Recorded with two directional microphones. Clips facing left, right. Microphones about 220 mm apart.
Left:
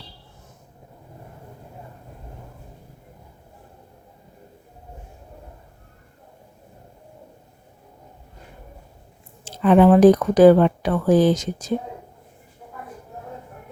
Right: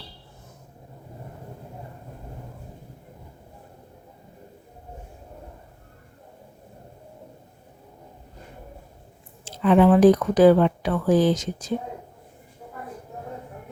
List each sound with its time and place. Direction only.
9.4 s speech: 50° left (ahead or behind)